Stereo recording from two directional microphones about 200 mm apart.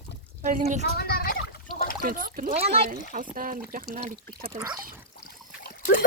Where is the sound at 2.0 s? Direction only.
45° right (ahead or behind).